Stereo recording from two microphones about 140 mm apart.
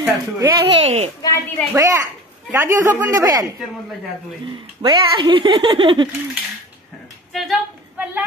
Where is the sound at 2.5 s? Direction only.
20° right (ahead or behind).